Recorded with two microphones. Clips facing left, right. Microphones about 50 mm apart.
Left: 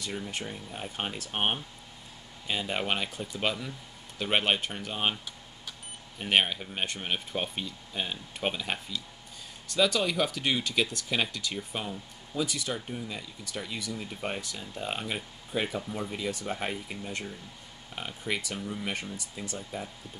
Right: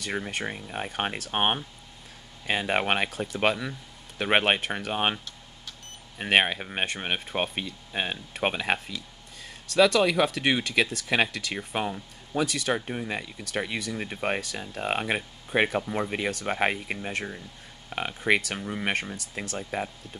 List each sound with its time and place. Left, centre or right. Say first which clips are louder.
0.0 s speech: right 5 dB; right
6.1 s speech: right 4 dB; right
9.8 s speech: right 6 dB; right
18.6 s speech: right 3 dB; right
19.1 s speech: right 4 dB; right